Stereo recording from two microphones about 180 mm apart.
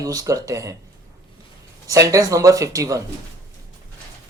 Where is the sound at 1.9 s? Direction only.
20° right (ahead or behind).